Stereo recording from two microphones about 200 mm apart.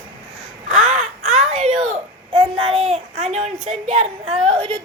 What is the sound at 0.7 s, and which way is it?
Crow, 35° right (ahead or behind).